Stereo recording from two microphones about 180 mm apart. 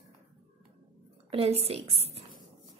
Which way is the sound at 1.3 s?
35° right (ahead or behind).